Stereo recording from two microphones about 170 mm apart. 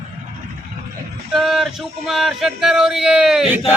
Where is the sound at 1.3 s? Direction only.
Centre (ahead or behind).